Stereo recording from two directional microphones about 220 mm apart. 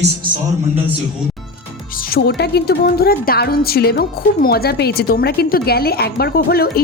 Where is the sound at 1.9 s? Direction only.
40° left (ahead or behind).